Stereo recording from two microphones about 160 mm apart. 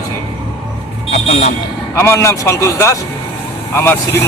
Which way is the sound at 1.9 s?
15° left (ahead or behind).